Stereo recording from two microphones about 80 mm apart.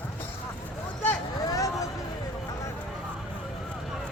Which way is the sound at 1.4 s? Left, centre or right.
Left.